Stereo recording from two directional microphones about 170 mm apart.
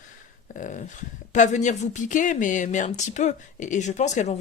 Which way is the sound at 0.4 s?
50° left (ahead or behind).